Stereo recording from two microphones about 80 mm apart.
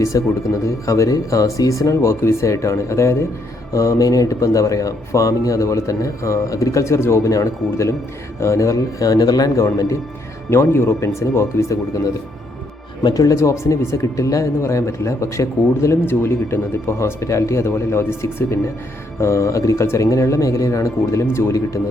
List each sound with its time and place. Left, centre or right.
0.1 s speech: left